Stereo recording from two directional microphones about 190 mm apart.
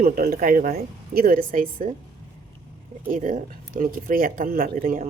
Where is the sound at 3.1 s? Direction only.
45° right (ahead or behind).